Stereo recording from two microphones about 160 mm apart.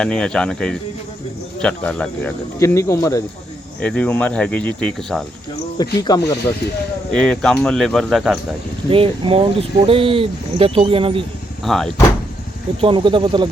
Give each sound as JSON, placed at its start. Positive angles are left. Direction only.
{"t": 0.0, "sound": "speech", "side_deg": 5}
{"t": 2.6, "sound": "speech", "side_deg": 20}
{"t": 3.8, "sound": "speech", "side_deg": 10}
{"t": 5.7, "sound": "speech", "side_deg": 25}
{"t": 7.1, "sound": "speech", "side_deg": 5}
{"t": 8.9, "sound": "speech", "side_deg": -35}
{"t": 11.6, "sound": "speech", "side_deg": 0}
{"t": 12.8, "sound": "speech", "side_deg": -30}